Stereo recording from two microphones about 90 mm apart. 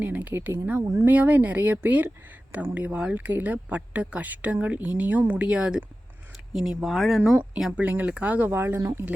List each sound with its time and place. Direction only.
0.0 s speech: 15° right (ahead or behind); by 7.2 s centre (ahead or behind)
7.3 s speech: 15° right (ahead or behind)